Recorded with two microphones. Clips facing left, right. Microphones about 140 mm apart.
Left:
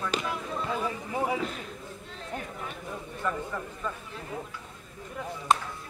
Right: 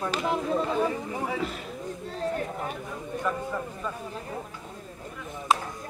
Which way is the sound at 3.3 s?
15° right (ahead or behind).